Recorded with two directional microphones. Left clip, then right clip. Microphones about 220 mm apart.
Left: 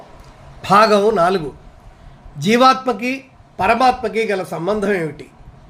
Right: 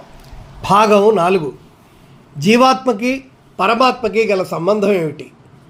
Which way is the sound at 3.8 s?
25° left (ahead or behind).